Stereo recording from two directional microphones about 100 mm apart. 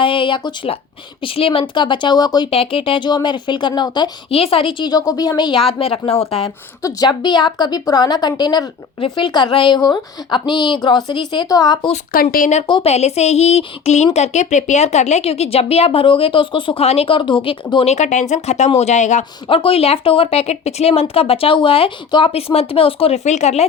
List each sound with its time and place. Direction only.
0.0 s a woman's voice: 60° left (ahead or behind)
2.5 s a woman's voice: 70° left (ahead or behind); by 4.1 s 50° left (ahead or behind)
4.3 s speech: 75° left (ahead or behind)
4.9 s speech: 40° left (ahead or behind)
5.5 s speech: 70° left (ahead or behind)
6.8 s a woman's voice: 45° left (ahead or behind)
12.8 s speech: 90° left; by 16.8 s 55° left (ahead or behind)
16.8 s speech: 85° left; by 17.8 s 60° left (ahead or behind)
18.4 s speech: 90° left
19.5 s speech: 65° left (ahead or behind); by 23.6 s 90° left